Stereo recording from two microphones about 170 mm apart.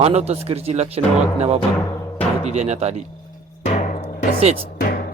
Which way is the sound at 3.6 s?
40° left (ahead or behind).